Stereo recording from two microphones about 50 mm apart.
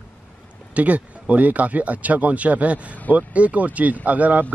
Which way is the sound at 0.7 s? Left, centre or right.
Right.